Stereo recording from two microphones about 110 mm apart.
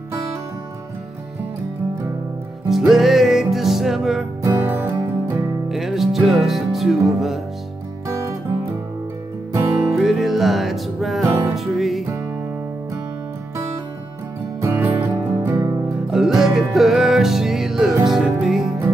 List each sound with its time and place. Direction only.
2.7 s music: centre (ahead or behind)
4.4 s music: 20° right (ahead or behind)
5.7 s music: 5° right (ahead or behind)
9.9 s music: centre (ahead or behind)
11.2 s music: 30° right (ahead or behind)
11.5 s music: centre (ahead or behind)
14.7 s music: 20° right (ahead or behind)
15.5 s music: 30° right (ahead or behind)
16.1 s music: 5° right (ahead or behind)